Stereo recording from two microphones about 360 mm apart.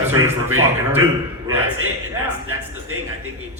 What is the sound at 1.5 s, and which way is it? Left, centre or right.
Speech, right.